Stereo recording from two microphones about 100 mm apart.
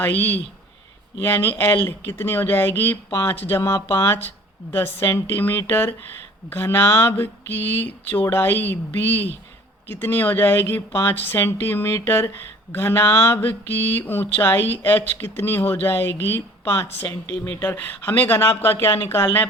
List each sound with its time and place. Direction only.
0.0 s mantra: 20° left (ahead or behind)